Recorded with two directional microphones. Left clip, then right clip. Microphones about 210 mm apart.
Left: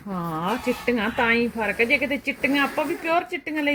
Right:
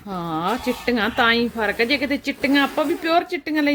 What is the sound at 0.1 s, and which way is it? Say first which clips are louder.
Speech: right 3 dB; 20° right (ahead or behind).